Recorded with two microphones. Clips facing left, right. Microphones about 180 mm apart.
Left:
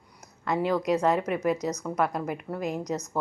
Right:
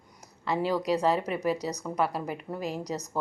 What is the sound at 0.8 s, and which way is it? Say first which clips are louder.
Speech: left 2 dB; 35° right (ahead or behind).